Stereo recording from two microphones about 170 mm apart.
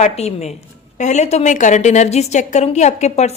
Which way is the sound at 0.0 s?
40° left (ahead or behind).